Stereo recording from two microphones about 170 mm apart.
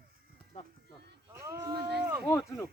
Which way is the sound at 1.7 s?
70° right (ahead or behind).